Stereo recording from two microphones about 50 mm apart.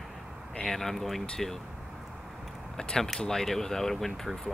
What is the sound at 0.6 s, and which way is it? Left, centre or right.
Speech, centre.